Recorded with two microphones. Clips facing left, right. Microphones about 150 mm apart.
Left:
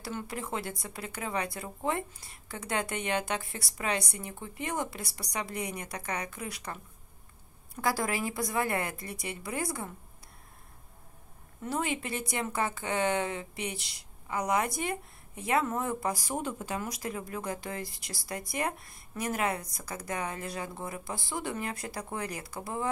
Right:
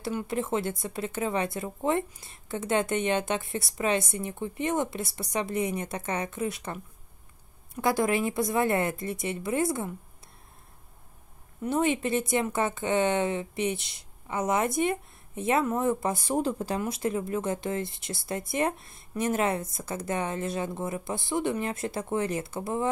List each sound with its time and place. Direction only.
0.0 s speech: 25° right (ahead or behind)
11.6 s speech: 20° right (ahead or behind)